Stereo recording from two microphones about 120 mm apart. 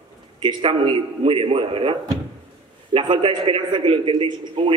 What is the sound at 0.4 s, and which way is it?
A man's voice, 45° right (ahead or behind).